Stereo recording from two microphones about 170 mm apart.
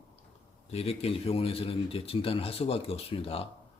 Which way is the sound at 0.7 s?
35° left (ahead or behind).